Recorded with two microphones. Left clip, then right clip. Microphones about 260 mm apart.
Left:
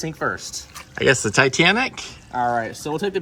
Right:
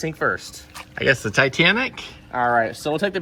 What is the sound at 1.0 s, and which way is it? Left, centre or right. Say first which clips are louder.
Speech: left 1 dB; centre.